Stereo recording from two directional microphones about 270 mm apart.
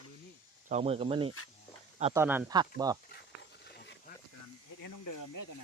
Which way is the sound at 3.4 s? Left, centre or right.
Left.